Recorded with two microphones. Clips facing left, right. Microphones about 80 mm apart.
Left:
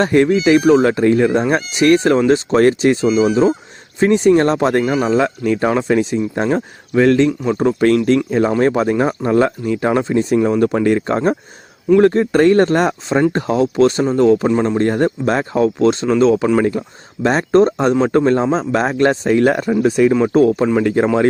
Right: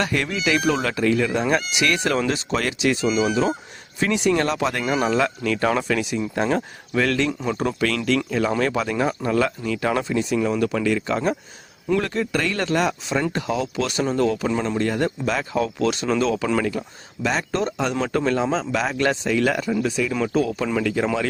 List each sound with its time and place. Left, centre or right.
0.0 s speech: left
4.9 s speech: left
7.8 s speech: left
14.8 s speech: left
15.5 s speech: left
16.0 s speech: centre; by 17.9 s left
17.9 s speech: left